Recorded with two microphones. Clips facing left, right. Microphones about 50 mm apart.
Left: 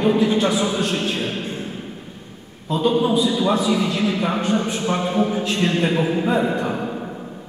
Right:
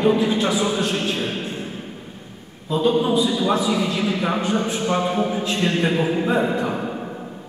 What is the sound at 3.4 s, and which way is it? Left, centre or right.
Speech, centre.